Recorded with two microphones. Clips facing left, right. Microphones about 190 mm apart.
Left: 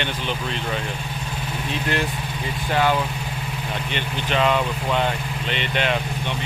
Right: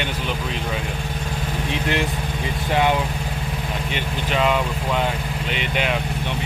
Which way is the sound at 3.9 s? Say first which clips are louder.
Even; 5° right (ahead or behind).